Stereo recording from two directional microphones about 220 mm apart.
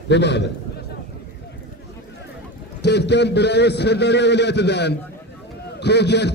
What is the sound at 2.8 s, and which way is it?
A man's voice, 50° left (ahead or behind).